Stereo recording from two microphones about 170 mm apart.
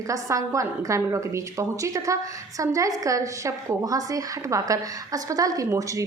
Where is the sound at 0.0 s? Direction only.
20° right (ahead or behind).